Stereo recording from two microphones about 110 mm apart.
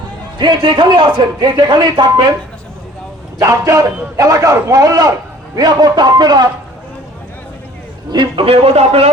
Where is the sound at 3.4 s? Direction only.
30° right (ahead or behind).